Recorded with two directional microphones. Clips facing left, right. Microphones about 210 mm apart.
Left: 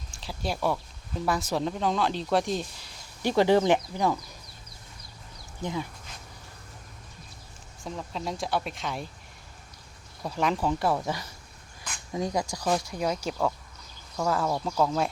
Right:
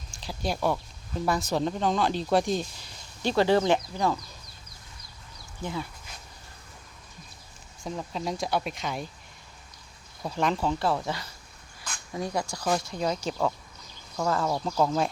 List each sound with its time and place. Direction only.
0.3 s speech: 5° left (ahead or behind)
3.2 s speech: 15° left (ahead or behind)
5.6 s speech: 15° left (ahead or behind)
7.9 s speech: centre (ahead or behind)
10.2 s speech: 5° left (ahead or behind)
12.6 s speech: 5° left (ahead or behind)
14.6 s speech: 5° right (ahead or behind)